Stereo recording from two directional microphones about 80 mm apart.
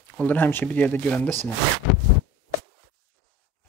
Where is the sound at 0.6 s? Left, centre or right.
Centre.